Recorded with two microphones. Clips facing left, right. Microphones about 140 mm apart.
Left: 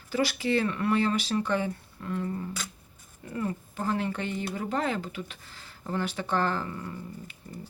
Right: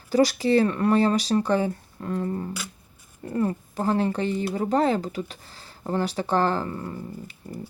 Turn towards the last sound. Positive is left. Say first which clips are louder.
# right 5 dB
turn(degrees=-35)  # may be behind; listen again after turning